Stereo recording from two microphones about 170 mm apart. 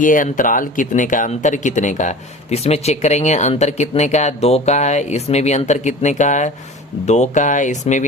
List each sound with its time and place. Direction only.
0.0 s speech: 50° left (ahead or behind)